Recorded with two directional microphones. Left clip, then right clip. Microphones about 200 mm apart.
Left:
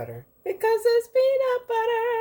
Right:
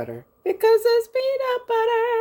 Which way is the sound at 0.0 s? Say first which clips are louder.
Right 5 dB; 45° right (ahead or behind).